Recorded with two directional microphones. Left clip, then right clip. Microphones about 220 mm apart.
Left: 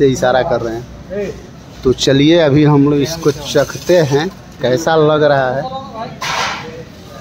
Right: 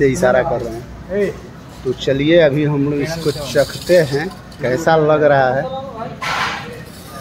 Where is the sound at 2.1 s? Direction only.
35° left (ahead or behind).